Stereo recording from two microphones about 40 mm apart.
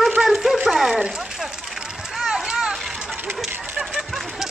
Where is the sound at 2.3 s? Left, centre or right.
Centre.